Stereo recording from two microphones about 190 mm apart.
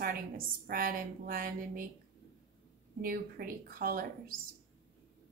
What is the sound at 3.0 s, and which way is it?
A woman's voice, 50° right (ahead or behind).